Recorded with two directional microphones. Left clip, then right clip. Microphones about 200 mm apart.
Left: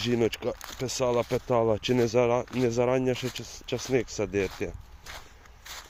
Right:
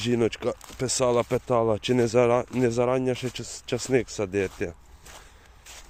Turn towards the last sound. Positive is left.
turn(degrees=-10)  # may be behind; listen again after turning